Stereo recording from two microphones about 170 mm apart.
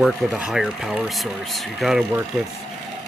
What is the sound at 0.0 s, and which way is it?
Speech, centre (ahead or behind).